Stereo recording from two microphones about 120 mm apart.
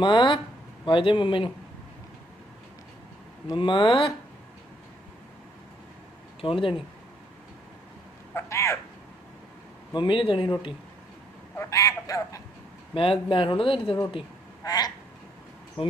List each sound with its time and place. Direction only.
0.0 s speech: 40° left (ahead or behind)
3.5 s speech: 40° left (ahead or behind)
6.4 s speech: 45° left (ahead or behind)
8.4 s speech: 25° left (ahead or behind)
9.9 s speech: 45° left (ahead or behind)
11.5 s speech: 25° left (ahead or behind)
12.9 s speech: 50° left (ahead or behind)
14.6 s a sound: 30° left (ahead or behind)